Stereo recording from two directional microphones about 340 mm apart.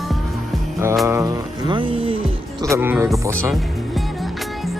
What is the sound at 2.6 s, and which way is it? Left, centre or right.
Speech, centre.